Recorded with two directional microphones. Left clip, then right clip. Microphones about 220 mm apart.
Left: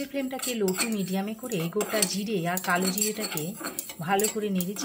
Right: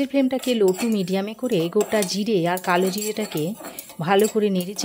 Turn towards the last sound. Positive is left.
turn(degrees=-45)  # may be behind; listen again after turning